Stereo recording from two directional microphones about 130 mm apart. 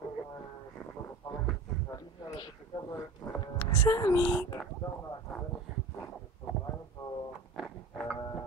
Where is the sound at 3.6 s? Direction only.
25° left (ahead or behind).